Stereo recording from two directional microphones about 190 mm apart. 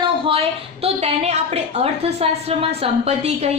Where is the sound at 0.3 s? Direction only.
30° right (ahead or behind).